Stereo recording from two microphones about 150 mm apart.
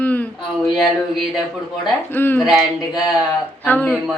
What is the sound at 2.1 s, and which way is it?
Speech, 15° left (ahead or behind).